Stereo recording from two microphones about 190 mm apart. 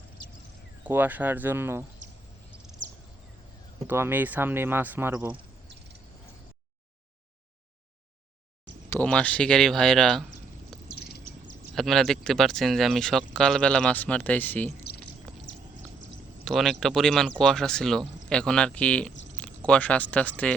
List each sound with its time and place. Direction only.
0.9 s speech: 10° right (ahead or behind)
2.0 s a sound: 40° right (ahead or behind)
3.8 s speech: 10° right (ahead or behind)
8.9 s speech: 5° left (ahead or behind)
10.8 s bird: 55° left (ahead or behind)
11.7 s speech: centre (ahead or behind)
16.4 s speech: centre (ahead or behind)
19.1 s a sound: 75° left (ahead or behind)
19.4 s speech: 5° left (ahead or behind)